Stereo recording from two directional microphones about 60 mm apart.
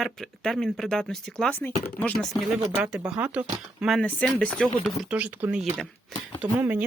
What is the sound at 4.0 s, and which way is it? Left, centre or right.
Speech, left.